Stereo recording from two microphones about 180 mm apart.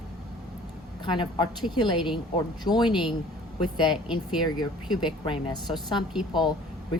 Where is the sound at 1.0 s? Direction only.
25° left (ahead or behind).